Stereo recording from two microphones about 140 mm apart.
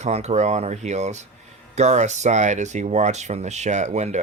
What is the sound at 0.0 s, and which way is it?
Speech, 50° right (ahead or behind).